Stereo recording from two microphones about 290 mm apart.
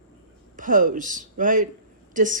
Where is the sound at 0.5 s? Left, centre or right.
Right.